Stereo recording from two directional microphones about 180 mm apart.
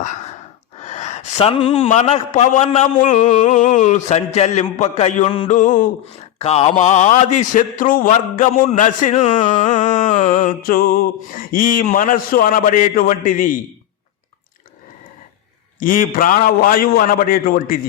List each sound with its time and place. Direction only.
0.8 s a man's voice: 40° left (ahead or behind)
5.5 s music: 45° left (ahead or behind)
6.4 s music: 35° left (ahead or behind)
15.8 s music: 50° left (ahead or behind)